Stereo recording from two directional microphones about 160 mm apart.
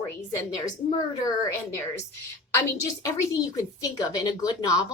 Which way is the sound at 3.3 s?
20° left (ahead or behind).